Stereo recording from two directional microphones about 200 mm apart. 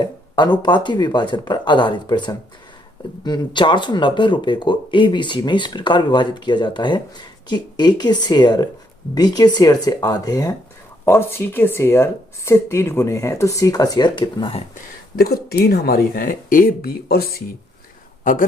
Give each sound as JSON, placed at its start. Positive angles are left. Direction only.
{"t": 0.0, "sound": "speech", "side_deg": 20}
{"t": 15.1, "sound": "speech", "side_deg": 50}
{"t": 18.2, "sound": "a sound", "side_deg": 40}